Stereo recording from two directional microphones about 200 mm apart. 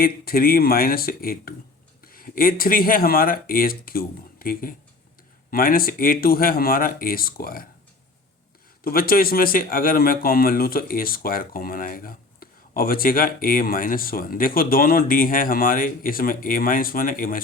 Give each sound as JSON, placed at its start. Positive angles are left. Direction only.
{"t": 0.0, "sound": "a man's voice", "side_deg": 45}
{"t": 8.8, "sound": "a man's voice", "side_deg": 45}